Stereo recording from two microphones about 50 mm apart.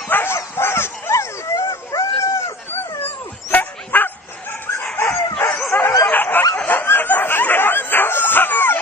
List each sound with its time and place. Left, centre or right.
0.1 s dog: left
2.7 s dog: left
5.4 s bow-wow: left
6.0 s snicker: left